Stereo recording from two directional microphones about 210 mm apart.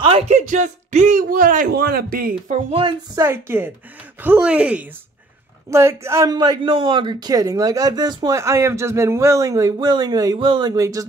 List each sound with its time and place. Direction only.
0.0 s speech: 30° right (ahead or behind)
2.4 s speech: 30° right (ahead or behind)
3.2 s a man's voice: 10° right (ahead or behind)